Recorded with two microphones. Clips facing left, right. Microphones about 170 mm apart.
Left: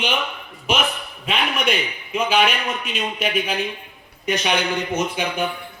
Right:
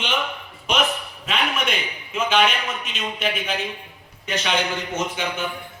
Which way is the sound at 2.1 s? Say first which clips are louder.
Left 1 dB; 10° left (ahead or behind).